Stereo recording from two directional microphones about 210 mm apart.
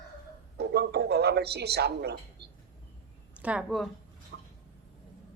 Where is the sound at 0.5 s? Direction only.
50° right (ahead or behind).